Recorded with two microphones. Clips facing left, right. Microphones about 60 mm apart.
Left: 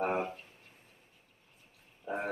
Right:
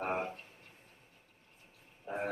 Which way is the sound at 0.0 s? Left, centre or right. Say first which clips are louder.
Left 3 dB; left.